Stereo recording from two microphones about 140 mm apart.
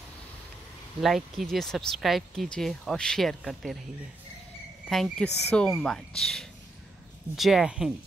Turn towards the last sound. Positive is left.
turn(degrees=-5)  # may be behind; listen again after turning